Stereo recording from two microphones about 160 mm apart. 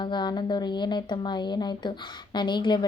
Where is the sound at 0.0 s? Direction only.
30° left (ahead or behind).